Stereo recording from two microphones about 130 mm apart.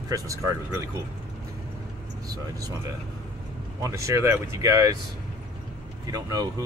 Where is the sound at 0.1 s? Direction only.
25° right (ahead or behind).